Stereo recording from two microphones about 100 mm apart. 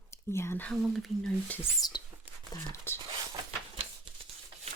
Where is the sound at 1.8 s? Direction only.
40° left (ahead or behind).